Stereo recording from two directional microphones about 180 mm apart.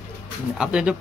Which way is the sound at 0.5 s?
5° right (ahead or behind).